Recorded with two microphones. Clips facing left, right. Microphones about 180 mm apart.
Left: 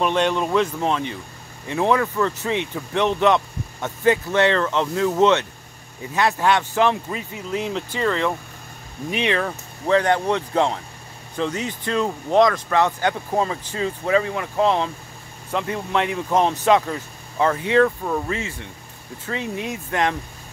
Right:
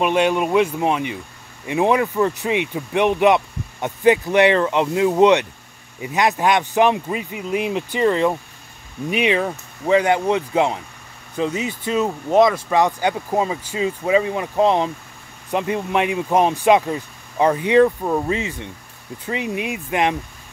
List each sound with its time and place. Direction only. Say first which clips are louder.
0.0 s speech: right 3 dB; 10° right (ahead or behind)